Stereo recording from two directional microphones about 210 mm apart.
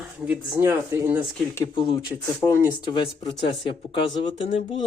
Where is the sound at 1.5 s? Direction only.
15° left (ahead or behind).